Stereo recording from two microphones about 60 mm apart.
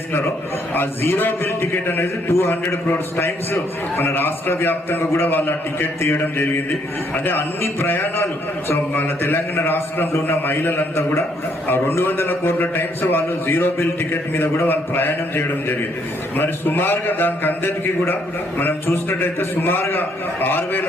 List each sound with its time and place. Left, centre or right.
0.7 s a man's voice: left